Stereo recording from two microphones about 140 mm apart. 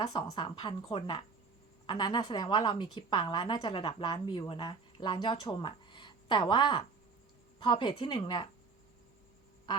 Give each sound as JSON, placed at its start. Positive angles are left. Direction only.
{"t": 0.0, "sound": "a woman's voice", "side_deg": 30}